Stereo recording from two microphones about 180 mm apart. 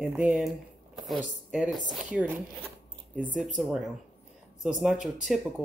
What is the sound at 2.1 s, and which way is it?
Speech, 10° right (ahead or behind).